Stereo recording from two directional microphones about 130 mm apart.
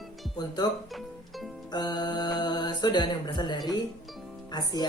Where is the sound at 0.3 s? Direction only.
30° left (ahead or behind).